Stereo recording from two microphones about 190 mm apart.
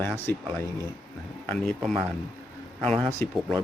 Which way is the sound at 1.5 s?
5° left (ahead or behind).